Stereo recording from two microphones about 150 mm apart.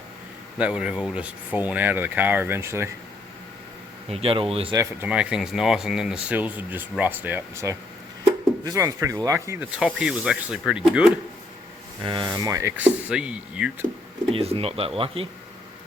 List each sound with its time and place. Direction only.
0.6 s speech: 10° right (ahead or behind)
4.1 s speech: 40° right (ahead or behind)
5.0 s speech: 5° right (ahead or behind)
9.7 s snake: 5° right (ahead or behind)
12.0 s speech: 30° right (ahead or behind)
12.7 s speech: 10° right (ahead or behind)
14.3 s speech: 40° right (ahead or behind)